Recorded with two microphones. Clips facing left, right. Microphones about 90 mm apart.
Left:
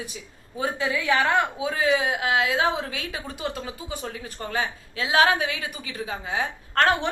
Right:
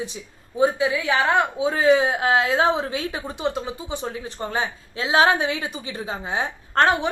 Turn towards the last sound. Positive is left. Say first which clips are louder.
# right 2 dB
turn(degrees=-25)  # may be behind; listen again after turning